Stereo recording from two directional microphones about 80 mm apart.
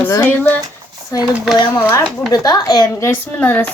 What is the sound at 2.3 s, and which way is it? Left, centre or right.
Speech, left.